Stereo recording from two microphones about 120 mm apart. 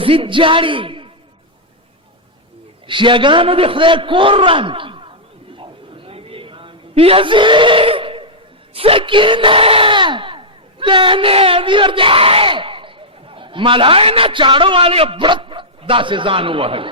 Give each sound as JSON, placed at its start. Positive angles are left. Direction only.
{"t": 0.0, "sound": "speech", "side_deg": -50}
{"t": 2.8, "sound": "a man's voice", "side_deg": -45}
{"t": 5.5, "sound": "a sound", "side_deg": -45}
{"t": 8.7, "sound": "speech", "side_deg": -50}